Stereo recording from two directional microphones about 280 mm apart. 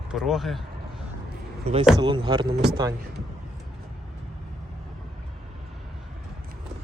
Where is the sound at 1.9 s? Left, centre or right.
Centre.